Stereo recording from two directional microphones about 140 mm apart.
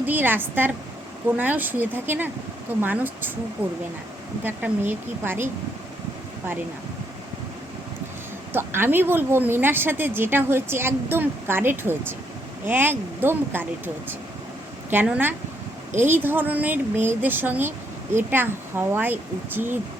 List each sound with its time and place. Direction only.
0.0 s a woman's voice: 15° right (ahead or behind)
8.5 s a woman's voice: 15° right (ahead or behind)